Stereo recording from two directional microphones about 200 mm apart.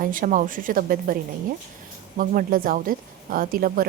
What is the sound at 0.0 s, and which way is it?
A woman's voice, 45° right (ahead or behind).